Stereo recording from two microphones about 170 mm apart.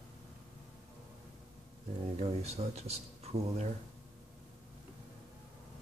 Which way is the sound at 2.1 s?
40° right (ahead or behind).